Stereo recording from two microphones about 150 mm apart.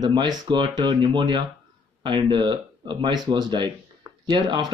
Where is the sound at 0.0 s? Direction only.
30° right (ahead or behind).